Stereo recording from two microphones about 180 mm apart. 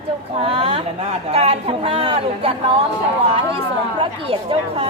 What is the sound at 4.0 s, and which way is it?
Speech, 30° right (ahead or behind).